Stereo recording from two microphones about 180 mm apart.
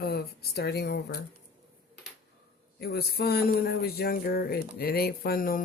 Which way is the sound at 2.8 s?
60° left (ahead or behind).